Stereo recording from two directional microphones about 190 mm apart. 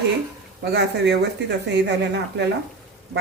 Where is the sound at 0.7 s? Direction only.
60° right (ahead or behind).